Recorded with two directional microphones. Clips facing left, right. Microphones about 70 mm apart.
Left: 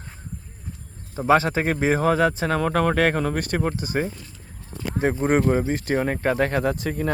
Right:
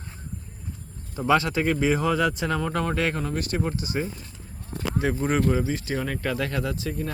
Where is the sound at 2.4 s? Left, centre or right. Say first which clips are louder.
Left 5 dB; left.